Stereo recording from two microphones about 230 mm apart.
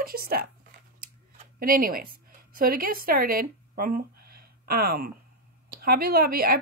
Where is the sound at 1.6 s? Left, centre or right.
Right.